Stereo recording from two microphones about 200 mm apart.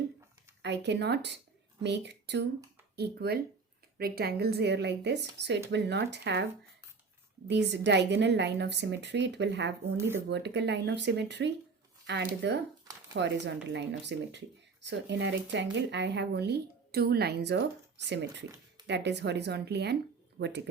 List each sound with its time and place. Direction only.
0.6 s speech: 60° right (ahead or behind)
7.4 s speech: 60° right (ahead or behind)